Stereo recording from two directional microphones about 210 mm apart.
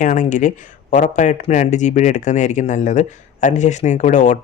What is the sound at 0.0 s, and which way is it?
Speech, 35° left (ahead or behind).